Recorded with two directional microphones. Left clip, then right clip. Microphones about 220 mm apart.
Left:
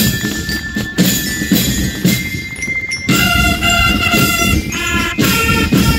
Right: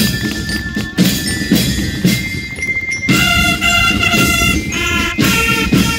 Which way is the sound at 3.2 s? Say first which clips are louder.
Even; 5° right (ahead or behind).